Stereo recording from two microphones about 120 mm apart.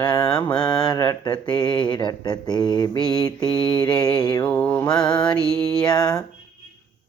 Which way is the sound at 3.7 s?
35° left (ahead or behind).